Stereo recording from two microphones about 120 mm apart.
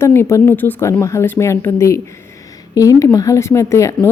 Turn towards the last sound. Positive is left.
turn(degrees=25)  # may be behind; listen again after turning